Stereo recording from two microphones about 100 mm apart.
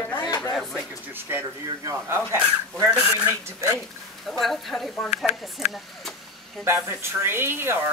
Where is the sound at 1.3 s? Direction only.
25° right (ahead or behind).